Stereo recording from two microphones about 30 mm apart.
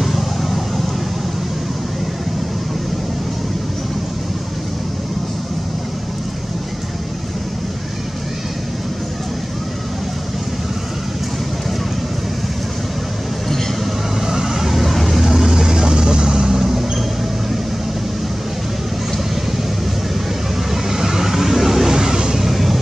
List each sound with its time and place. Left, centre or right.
0.0 s vehicle: centre
14.2 s vehicle: centre
16.5 s a sound: centre
20.7 s vehicle: centre
22.4 s vehicle: centre